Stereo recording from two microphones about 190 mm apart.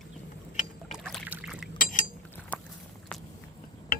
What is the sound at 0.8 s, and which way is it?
Trickle, centre (ahead or behind).